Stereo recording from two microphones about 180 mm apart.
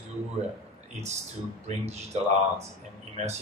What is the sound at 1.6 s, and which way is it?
Speech, 40° right (ahead or behind).